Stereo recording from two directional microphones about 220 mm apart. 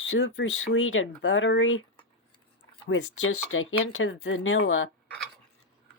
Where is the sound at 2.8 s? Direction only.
65° left (ahead or behind).